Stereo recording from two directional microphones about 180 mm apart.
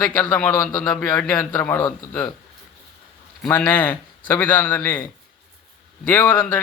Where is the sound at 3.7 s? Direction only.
10° left (ahead or behind).